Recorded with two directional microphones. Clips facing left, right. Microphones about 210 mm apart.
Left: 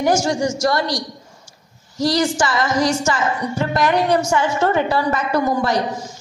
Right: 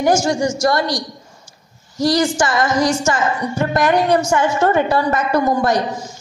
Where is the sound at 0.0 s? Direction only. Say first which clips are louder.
Right 2 dB; 45° right (ahead or behind).